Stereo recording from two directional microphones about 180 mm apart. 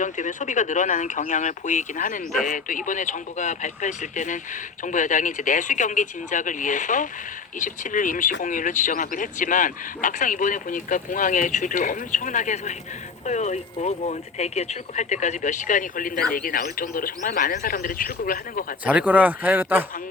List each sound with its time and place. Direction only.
0.0 s speech: 45° left (ahead or behind)
18.9 s speech: 10° right (ahead or behind)